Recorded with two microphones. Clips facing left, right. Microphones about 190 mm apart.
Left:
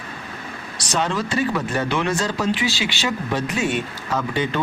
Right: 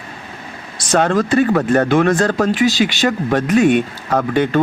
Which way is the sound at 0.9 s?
55° right (ahead or behind).